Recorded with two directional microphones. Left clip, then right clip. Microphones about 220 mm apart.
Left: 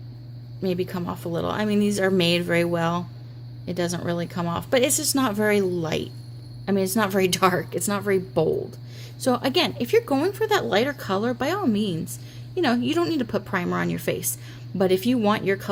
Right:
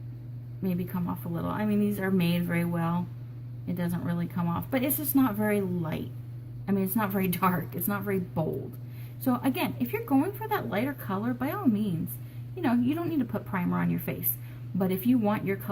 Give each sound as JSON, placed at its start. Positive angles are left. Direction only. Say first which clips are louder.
{"t": 1.3, "sound": "speech", "louder": "left 7 dB", "side_deg": 45}